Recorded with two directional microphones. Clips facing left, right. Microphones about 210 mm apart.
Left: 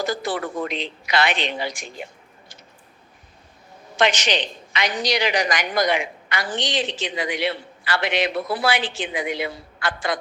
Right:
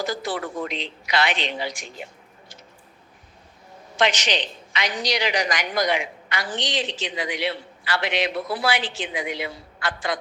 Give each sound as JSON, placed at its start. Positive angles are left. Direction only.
{"t": 0.0, "sound": "a woman's voice", "side_deg": 50}
{"t": 3.9, "sound": "a woman's voice", "side_deg": 50}